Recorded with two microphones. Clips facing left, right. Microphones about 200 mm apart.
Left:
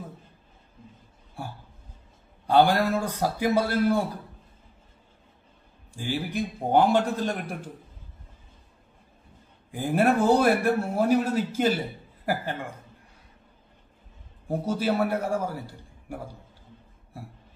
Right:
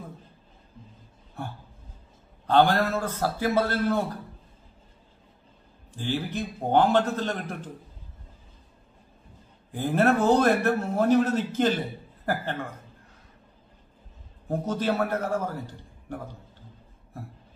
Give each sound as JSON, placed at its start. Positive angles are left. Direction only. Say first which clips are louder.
{"t": 2.4, "sound": "a man's voice", "louder": "left 1 dB", "side_deg": 10}
{"t": 5.9, "sound": "a man's voice", "louder": "even", "side_deg": 10}
{"t": 9.7, "sound": "a man's voice", "louder": "even", "side_deg": 10}
{"t": 14.5, "sound": "a man's voice", "louder": "left 1 dB", "side_deg": 10}